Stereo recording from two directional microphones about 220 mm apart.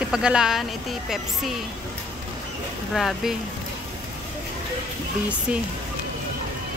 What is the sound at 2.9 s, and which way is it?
Speech, centre (ahead or behind).